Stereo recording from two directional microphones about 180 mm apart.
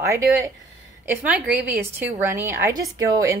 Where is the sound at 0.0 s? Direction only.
15° right (ahead or behind).